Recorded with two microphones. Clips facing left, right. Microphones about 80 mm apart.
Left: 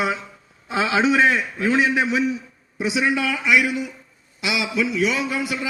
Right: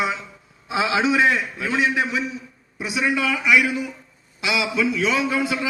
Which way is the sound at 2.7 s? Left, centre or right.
Centre.